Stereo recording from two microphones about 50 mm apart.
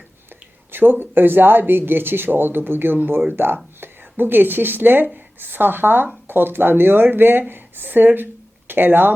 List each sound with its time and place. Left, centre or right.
0.7 s a woman's voice: right